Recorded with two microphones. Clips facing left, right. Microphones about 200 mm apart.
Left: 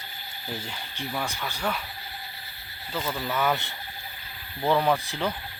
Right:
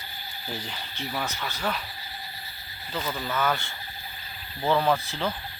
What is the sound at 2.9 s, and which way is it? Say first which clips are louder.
Speech: left 1 dB; centre (ahead or behind).